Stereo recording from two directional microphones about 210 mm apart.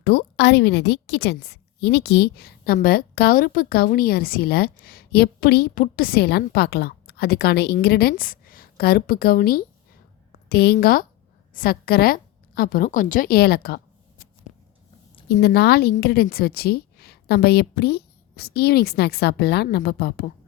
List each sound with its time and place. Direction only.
0.0 s a woman's voice: 50° left (ahead or behind)
15.3 s a woman's voice: 50° left (ahead or behind)